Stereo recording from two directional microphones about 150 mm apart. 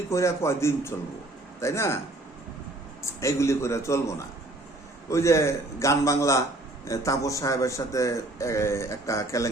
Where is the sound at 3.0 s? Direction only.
20° left (ahead or behind).